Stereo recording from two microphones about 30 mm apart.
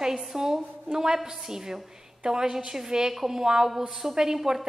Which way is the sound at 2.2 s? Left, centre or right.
Right.